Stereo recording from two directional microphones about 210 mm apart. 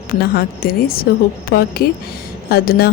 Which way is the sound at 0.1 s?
45° left (ahead or behind).